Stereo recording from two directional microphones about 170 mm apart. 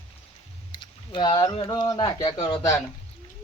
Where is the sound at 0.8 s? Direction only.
25° left (ahead or behind).